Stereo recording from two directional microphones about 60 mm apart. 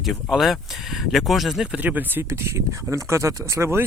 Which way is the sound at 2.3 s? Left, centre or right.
Right.